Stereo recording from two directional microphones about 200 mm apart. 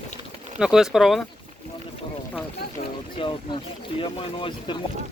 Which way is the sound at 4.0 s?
25° left (ahead or behind).